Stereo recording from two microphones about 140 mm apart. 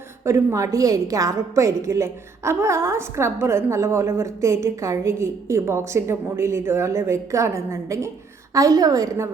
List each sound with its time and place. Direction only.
0.3 s a woman's voice: 20° right (ahead or behind)